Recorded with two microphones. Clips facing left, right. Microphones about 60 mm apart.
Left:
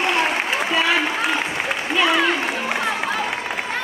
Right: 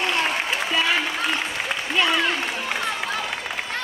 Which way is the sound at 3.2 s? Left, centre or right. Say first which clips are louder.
Left 4 dB; left.